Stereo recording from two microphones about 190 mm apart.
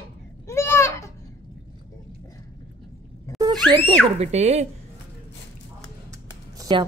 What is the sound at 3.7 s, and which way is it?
Speech, 25° right (ahead or behind).